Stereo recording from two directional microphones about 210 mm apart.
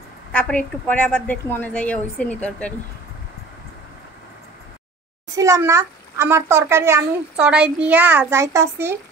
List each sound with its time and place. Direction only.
0.3 s a woman's voice: 5° left (ahead or behind)
5.3 s a child's voice: 15° right (ahead or behind)